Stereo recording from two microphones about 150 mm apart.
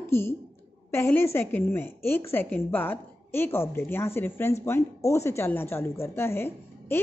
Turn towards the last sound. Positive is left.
turn(degrees=15)  # may be behind; listen again after turning